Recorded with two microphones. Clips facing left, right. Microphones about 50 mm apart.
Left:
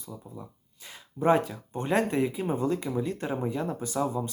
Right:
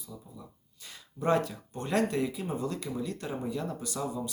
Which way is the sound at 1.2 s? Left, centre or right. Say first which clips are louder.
Left 4 dB; left.